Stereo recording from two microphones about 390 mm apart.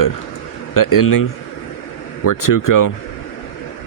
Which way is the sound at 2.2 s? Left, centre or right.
Left.